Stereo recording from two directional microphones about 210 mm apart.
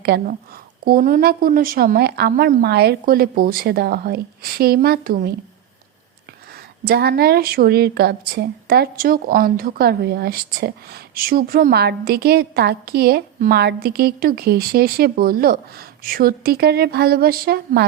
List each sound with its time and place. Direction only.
0.0 s a woman's voice: 50° right (ahead or behind)
6.8 s a woman's voice: 50° right (ahead or behind)